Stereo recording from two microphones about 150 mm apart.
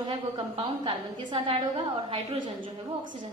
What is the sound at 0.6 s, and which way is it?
A woman's voice, 40° right (ahead or behind).